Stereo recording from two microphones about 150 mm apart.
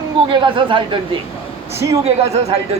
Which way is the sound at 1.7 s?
20° right (ahead or behind).